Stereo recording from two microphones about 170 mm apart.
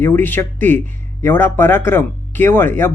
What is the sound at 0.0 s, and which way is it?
Speech, 15° left (ahead or behind).